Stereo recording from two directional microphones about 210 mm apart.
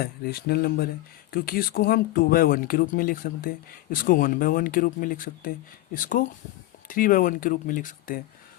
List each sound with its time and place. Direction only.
0.0 s speech: 45° left (ahead or behind)